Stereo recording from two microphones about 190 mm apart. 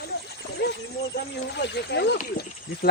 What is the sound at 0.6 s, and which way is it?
Wild animals, 60° left (ahead or behind).